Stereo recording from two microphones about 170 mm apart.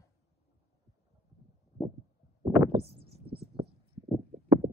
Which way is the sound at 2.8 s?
70° right (ahead or behind).